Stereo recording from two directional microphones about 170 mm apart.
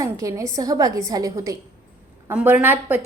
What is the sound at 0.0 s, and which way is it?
A woman's voice, 20° right (ahead or behind).